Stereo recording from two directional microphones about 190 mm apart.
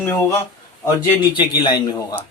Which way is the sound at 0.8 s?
20° left (ahead or behind).